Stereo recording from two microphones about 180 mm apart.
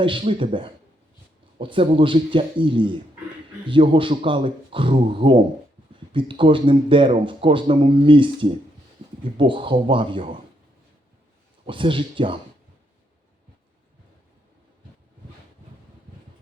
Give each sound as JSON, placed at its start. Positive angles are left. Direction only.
{"t": 0.0, "sound": "speech", "side_deg": -30}
{"t": 9.0, "sound": "a sound", "side_deg": -30}
{"t": 9.4, "sound": "speech", "side_deg": -30}
{"t": 11.6, "sound": "speech", "side_deg": -30}